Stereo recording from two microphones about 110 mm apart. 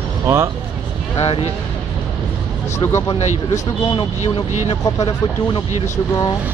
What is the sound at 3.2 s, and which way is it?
Speech, 90° left.